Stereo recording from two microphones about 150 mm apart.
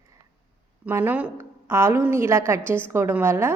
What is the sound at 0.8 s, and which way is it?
A woman's voice, 10° right (ahead or behind).